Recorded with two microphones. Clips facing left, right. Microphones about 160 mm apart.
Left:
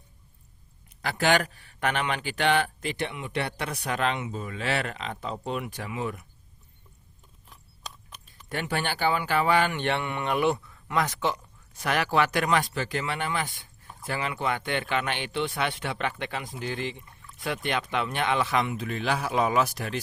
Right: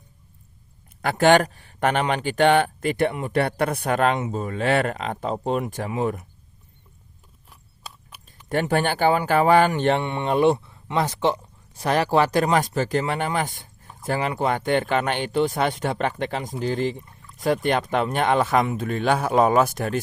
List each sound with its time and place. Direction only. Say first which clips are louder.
1.0 s speech: right 8 dB; 45° right (ahead or behind)
7.5 s a sound: right 1 dB; 10° right (ahead or behind)
8.4 s speech: right 8 dB; 45° right (ahead or behind)